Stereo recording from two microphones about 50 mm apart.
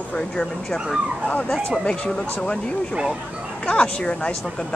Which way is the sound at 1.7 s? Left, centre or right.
Centre.